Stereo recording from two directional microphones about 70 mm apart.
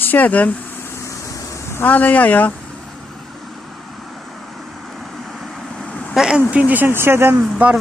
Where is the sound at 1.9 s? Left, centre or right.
Left.